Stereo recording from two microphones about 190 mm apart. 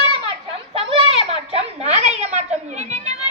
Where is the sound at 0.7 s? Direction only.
30° right (ahead or behind).